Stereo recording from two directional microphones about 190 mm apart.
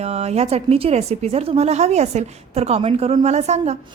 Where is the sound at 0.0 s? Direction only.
35° right (ahead or behind).